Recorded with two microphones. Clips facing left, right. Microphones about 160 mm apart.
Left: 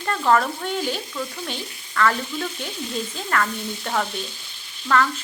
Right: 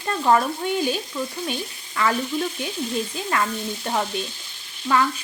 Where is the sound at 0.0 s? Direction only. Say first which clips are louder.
Even; 15° right (ahead or behind).